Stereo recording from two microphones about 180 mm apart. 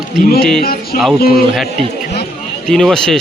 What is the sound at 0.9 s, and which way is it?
Speech, 50° left (ahead or behind).